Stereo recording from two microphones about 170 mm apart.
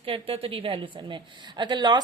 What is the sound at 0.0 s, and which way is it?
A woman's voice, 35° right (ahead or behind).